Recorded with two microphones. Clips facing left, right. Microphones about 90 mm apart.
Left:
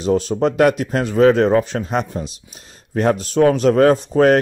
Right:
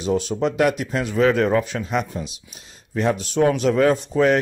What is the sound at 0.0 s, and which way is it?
Speech, 40° left (ahead or behind).